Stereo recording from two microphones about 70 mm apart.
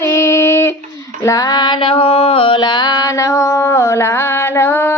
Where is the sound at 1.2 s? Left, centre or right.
Left.